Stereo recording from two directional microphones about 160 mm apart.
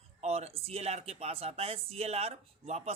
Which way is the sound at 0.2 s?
40° right (ahead or behind).